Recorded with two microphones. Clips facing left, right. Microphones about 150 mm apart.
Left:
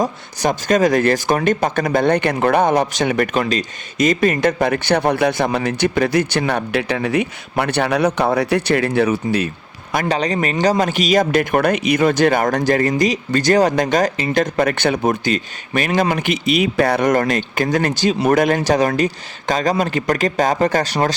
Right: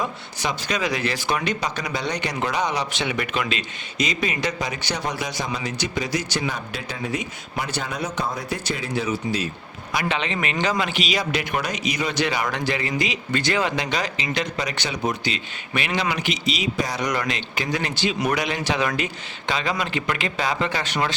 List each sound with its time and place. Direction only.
0.0 s speech: 45° left (ahead or behind); by 9.5 s 60° left (ahead or behind)
9.9 s speech: 45° left (ahead or behind)